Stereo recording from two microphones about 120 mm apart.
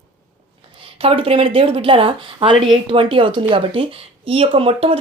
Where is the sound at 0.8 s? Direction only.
50° right (ahead or behind).